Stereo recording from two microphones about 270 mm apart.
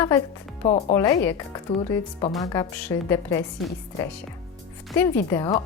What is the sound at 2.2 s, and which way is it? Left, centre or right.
A woman's voice, centre.